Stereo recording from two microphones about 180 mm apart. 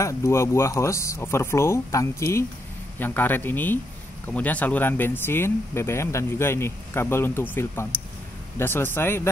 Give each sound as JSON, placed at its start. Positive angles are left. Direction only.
{"t": 0.0, "sound": "speech", "side_deg": 15}